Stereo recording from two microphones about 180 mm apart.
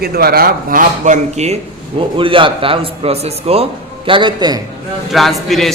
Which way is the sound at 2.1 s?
30° right (ahead or behind).